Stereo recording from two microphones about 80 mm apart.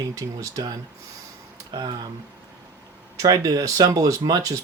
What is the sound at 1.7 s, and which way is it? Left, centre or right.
Speech, right.